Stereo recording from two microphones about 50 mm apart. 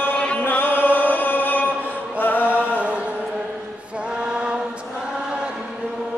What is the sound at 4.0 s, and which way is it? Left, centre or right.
Mantra, centre.